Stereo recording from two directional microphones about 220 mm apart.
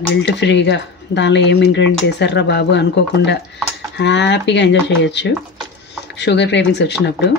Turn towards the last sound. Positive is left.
turn(degrees=50)  # may be behind; listen again after turning